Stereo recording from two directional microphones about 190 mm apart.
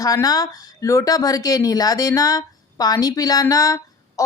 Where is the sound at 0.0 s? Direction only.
20° left (ahead or behind).